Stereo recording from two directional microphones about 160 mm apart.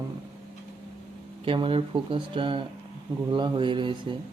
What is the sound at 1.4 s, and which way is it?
Speech, 35° right (ahead or behind).